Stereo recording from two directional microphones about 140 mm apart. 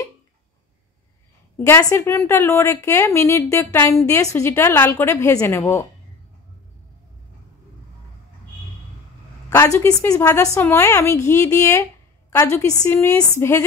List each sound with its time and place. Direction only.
1.6 s a woman's voice: 20° left (ahead or behind)
9.5 s a woman's voice: 15° left (ahead or behind)